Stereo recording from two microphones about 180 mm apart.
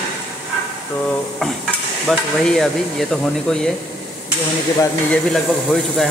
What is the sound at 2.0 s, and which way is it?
Speech, centre (ahead or behind).